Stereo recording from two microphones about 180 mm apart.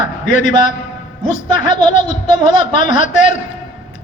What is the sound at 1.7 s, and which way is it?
A man's voice, 40° left (ahead or behind).